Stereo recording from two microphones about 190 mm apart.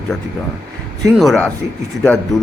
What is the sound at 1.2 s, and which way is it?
Speech, 5° left (ahead or behind).